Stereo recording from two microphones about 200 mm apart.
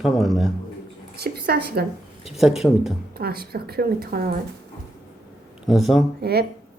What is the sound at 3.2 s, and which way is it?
Speech, 50° right (ahead or behind).